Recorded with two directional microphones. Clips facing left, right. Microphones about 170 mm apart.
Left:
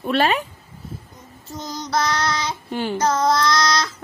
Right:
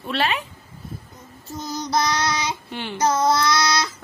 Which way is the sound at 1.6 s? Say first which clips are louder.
Even; 10° right (ahead or behind).